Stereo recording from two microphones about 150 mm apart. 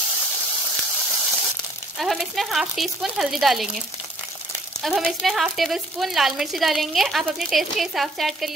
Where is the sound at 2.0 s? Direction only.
Centre (ahead or behind).